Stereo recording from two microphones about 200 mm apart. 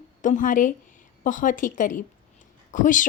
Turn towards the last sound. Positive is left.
turn(degrees=40)  # may be behind; listen again after turning